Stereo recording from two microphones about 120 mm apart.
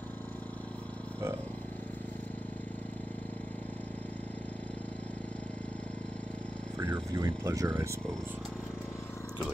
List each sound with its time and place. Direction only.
6.9 s speech: 35° right (ahead or behind)